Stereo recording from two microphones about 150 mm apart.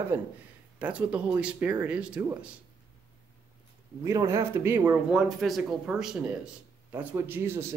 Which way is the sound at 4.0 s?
20° right (ahead or behind).